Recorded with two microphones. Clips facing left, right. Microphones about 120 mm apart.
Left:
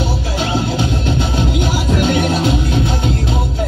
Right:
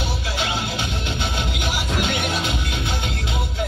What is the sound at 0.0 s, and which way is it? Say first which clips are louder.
Music: left 7 dB; 40° left (ahead or behind).